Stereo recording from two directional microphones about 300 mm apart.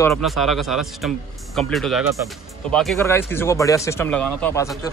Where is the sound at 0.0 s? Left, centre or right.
Centre.